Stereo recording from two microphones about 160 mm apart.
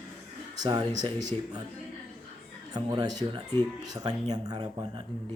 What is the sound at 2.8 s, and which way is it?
A man's voice, 25° right (ahead or behind).